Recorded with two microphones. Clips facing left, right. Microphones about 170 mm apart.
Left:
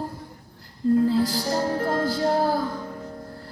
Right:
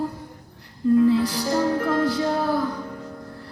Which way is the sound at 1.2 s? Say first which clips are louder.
Right 1 dB; 35° left (ahead or behind).